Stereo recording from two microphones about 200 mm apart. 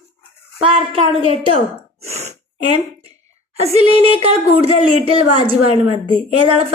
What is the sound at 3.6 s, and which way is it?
Speech, 30° right (ahead or behind).